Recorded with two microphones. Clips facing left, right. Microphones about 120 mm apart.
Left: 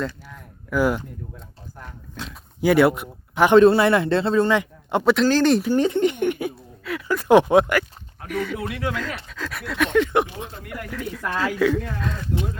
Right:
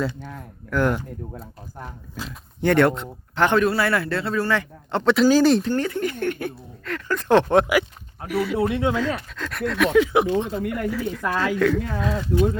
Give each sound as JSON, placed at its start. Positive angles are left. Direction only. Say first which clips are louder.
{"t": 0.7, "sound": "speech", "louder": "left 1 dB", "side_deg": 5}
{"t": 2.1, "sound": "speech", "louder": "even", "side_deg": 5}
{"t": 3.6, "sound": "a man's voice", "louder": "left 6 dB", "side_deg": 25}
{"t": 5.1, "sound": "speech", "louder": "right 4 dB", "side_deg": -5}
{"t": 5.7, "sound": "a sound", "louder": "left 5 dB", "side_deg": 20}
{"t": 7.5, "sound": "speech", "louder": "left 1 dB", "side_deg": 0}
{"t": 8.5, "sound": "speech", "louder": "right 6 dB", "side_deg": -25}
{"t": 9.3, "sound": "speech", "louder": "right 4 dB", "side_deg": 0}